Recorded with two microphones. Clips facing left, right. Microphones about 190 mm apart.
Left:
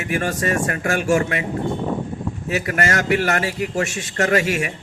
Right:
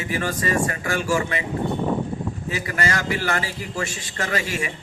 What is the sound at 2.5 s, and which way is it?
A man's voice, 55° left (ahead or behind).